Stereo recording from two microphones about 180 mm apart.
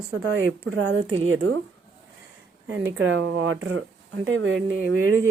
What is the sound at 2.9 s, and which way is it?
A woman's voice, 90° right.